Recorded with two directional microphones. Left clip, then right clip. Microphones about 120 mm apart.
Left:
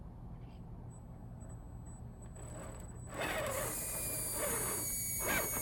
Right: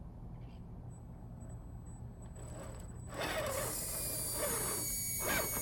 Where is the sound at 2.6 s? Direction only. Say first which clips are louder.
Even; centre (ahead or behind).